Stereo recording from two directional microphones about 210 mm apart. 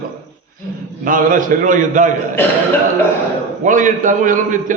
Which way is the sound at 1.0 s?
40° right (ahead or behind).